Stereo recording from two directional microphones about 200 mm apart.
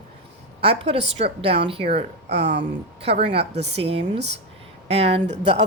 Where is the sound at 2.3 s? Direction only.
60° right (ahead or behind).